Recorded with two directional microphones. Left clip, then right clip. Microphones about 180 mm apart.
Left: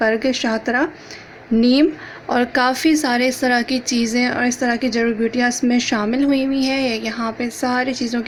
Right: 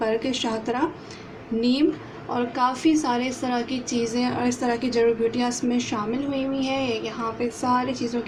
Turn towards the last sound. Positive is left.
turn(degrees=45)  # may be behind; listen again after turning